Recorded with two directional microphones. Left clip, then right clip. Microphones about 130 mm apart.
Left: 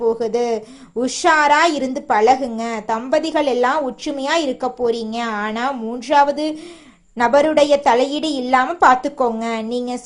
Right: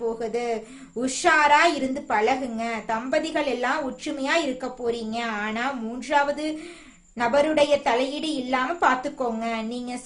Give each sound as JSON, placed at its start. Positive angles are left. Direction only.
{"t": 0.2, "sound": "a woman's voice", "side_deg": 40}